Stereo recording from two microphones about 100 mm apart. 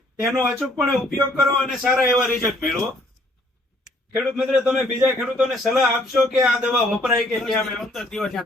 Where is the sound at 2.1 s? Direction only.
5° left (ahead or behind).